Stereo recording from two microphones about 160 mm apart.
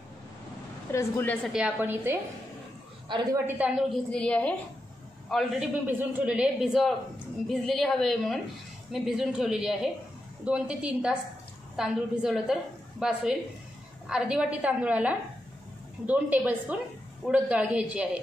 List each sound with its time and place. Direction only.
0.9 s a woman's voice: 15° left (ahead or behind)
1.5 s a woman's voice: 10° right (ahead or behind)
3.1 s a woman's voice: 30° right (ahead or behind)
3.4 s a woman's voice: 10° right (ahead or behind)
5.9 s a woman's voice: 10° right (ahead or behind)